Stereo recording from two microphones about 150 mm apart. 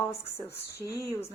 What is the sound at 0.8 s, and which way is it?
Speech, 20° right (ahead or behind).